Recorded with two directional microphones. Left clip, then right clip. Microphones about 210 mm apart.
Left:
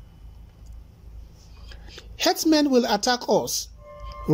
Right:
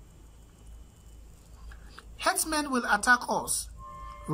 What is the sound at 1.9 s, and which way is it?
Speech, 20° left (ahead or behind).